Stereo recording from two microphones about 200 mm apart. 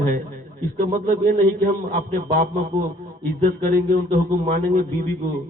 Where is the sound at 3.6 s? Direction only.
45° right (ahead or behind).